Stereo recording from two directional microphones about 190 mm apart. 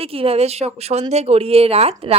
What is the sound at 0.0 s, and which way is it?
A woman's voice, 30° right (ahead or behind).